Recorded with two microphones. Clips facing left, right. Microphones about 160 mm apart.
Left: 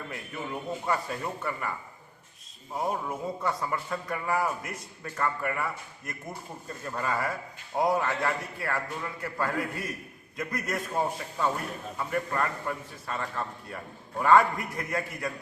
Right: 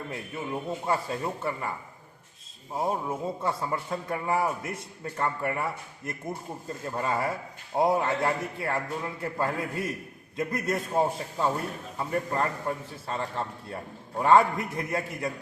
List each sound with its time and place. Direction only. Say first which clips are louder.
0.1 s a man's voice: right 3 dB; 25° right (ahead or behind)
2.7 s a man's voice: right 2 dB; 25° right (ahead or behind)
6.8 s a man's voice: right 2 dB; 25° right (ahead or behind)